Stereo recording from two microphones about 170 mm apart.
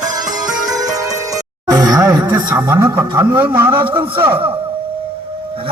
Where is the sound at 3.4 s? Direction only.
10° right (ahead or behind).